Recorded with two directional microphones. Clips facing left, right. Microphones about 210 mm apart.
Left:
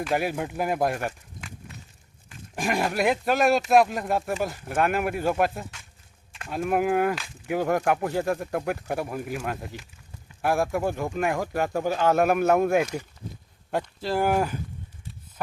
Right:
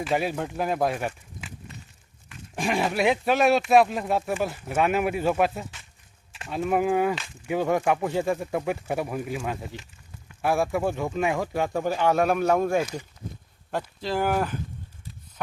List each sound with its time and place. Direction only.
0.0 s speech: centre (ahead or behind)
14.0 s speech: 5° left (ahead or behind)